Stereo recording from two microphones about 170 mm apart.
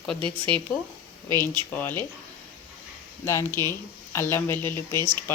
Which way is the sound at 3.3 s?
15° left (ahead or behind).